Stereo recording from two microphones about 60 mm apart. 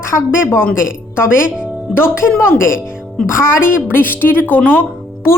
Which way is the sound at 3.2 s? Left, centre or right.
Centre.